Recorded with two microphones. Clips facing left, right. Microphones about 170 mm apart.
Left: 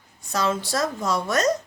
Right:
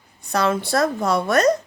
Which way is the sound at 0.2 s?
60° right (ahead or behind).